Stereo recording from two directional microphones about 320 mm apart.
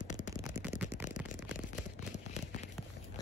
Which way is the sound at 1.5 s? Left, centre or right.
Left.